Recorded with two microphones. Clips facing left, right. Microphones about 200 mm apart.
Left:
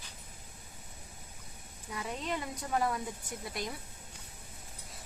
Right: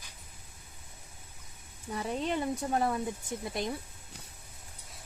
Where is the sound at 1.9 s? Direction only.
30° right (ahead or behind).